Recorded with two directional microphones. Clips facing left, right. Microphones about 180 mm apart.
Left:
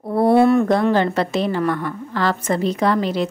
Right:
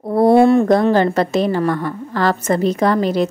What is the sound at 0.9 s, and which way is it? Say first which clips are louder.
A woman's voice: right 3 dB; 45° right (ahead or behind).